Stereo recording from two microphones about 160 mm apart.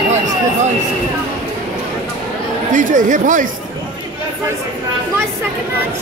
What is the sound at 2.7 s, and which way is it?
Chatter, 55° right (ahead or behind).